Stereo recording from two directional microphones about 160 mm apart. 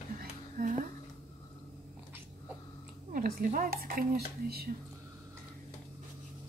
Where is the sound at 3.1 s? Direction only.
60° right (ahead or behind).